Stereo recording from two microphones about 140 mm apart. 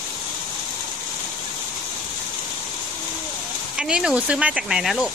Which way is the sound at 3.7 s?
5° right (ahead or behind).